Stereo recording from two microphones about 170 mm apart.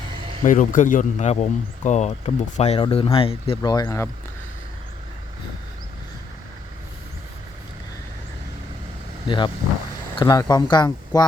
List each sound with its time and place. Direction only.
0.4 s a man's voice: 50° left (ahead or behind); by 4.1 s 20° left (ahead or behind)
9.2 s speech: 30° left (ahead or behind)